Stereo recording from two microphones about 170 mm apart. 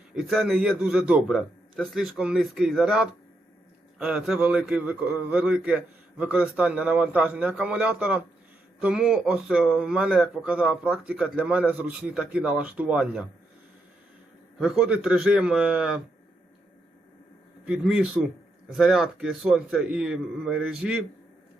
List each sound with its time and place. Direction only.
0.1 s a man's voice: centre (ahead or behind)
14.6 s speech: 5° right (ahead or behind)
17.7 s speech: centre (ahead or behind)